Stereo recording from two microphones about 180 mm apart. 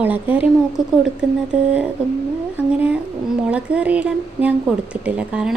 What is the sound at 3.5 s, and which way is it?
A woman's voice, 5° right (ahead or behind).